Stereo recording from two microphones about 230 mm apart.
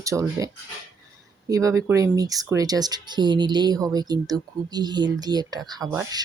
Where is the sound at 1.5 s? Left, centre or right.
Centre.